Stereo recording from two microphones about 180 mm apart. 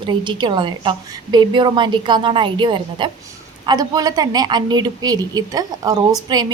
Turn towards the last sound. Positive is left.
turn(degrees=-25)  # may be behind; listen again after turning